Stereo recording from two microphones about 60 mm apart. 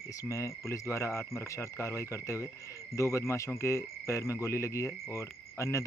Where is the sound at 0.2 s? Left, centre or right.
Left.